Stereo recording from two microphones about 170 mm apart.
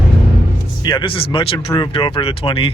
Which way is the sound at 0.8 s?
30° left (ahead or behind).